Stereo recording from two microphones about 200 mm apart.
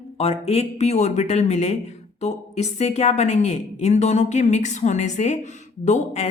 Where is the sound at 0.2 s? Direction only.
30° left (ahead or behind).